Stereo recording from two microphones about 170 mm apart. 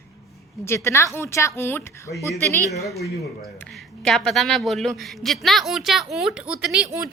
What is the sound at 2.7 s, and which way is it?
Speech, 65° left (ahead or behind).